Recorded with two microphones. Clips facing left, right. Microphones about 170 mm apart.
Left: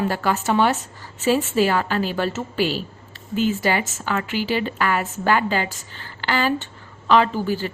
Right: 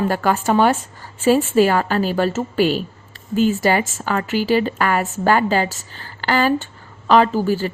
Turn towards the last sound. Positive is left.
turn(degrees=-40)  # may be behind; listen again after turning